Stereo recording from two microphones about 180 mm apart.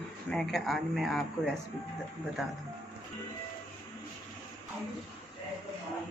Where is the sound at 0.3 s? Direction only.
5° left (ahead or behind).